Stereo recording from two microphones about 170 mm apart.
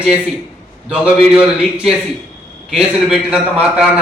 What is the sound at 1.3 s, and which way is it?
A man's voice, 5° right (ahead or behind).